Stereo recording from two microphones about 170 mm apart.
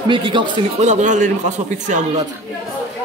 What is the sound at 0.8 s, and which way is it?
Speech, 45° right (ahead or behind).